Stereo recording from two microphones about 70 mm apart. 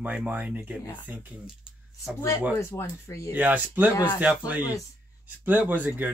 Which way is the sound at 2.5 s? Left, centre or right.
Left.